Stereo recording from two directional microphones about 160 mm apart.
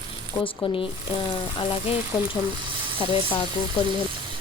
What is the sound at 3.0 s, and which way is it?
Speech, 35° left (ahead or behind).